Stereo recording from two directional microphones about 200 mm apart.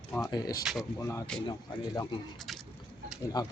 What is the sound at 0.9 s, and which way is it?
Speech, 15° left (ahead or behind).